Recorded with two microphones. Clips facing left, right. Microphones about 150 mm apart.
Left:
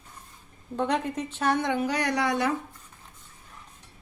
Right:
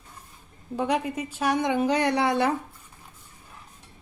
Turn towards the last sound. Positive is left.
turn(degrees=-30)  # may be behind; listen again after turning